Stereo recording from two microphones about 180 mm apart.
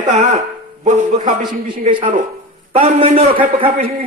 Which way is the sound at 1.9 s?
25° right (ahead or behind).